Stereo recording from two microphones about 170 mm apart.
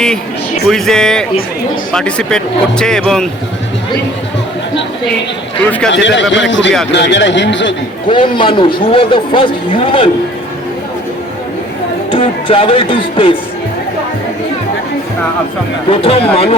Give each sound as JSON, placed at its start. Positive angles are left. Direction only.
{"t": 0.7, "sound": "speech", "side_deg": 5}
{"t": 5.9, "sound": "a man's voice", "side_deg": 90}
{"t": 8.1, "sound": "a man's voice", "side_deg": 30}
{"t": 12.1, "sound": "a man's voice", "side_deg": 30}
{"t": 15.9, "sound": "a man's voice", "side_deg": 35}